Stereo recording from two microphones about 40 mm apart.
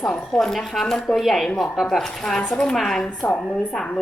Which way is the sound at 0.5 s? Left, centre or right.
Centre.